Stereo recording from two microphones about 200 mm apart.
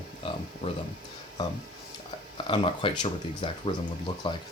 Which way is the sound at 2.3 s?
25° left (ahead or behind).